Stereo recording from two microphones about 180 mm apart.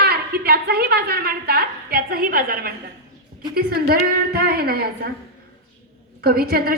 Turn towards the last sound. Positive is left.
turn(degrees=-55)  # may be behind; listen again after turning